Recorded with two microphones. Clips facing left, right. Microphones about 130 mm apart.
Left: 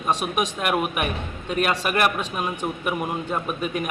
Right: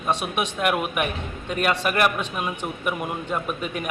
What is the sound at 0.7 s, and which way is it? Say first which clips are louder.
A man's voice: even; 5° left (ahead or behind).